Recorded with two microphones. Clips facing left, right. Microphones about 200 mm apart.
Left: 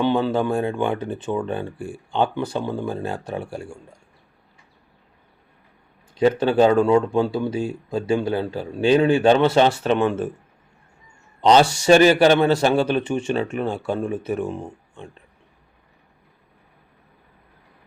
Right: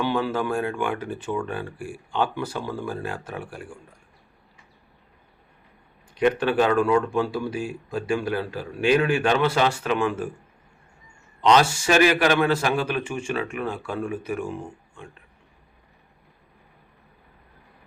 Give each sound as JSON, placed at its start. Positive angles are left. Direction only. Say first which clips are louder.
{"t": 0.0, "sound": "speech", "louder": "left 5 dB", "side_deg": 25}
{"t": 6.1, "sound": "speech", "louder": "left 4 dB", "side_deg": 25}
{"t": 11.3, "sound": "a man's voice", "louder": "left 3 dB", "side_deg": 30}